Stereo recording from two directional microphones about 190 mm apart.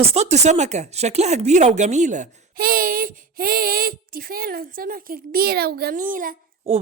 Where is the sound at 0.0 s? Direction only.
35° right (ahead or behind).